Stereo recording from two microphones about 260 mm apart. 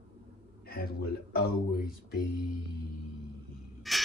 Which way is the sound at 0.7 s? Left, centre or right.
Left.